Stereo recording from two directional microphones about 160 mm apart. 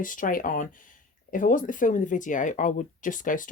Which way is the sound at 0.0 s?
55° left (ahead or behind).